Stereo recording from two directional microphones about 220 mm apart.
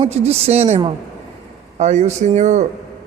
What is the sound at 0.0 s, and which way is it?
A woman's voice, 30° right (ahead or behind).